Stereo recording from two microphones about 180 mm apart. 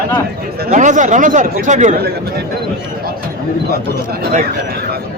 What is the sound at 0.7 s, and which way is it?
Speech, 45° right (ahead or behind).